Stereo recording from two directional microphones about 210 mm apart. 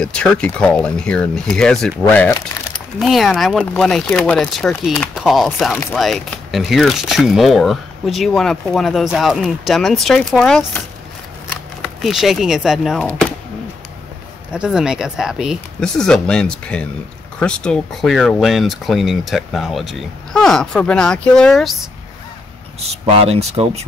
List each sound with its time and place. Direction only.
0.0 s speech: 5° left (ahead or behind)
11.8 s speech: centre (ahead or behind)
14.5 s speech: 5° right (ahead or behind)
23.0 s speech: 30° right (ahead or behind)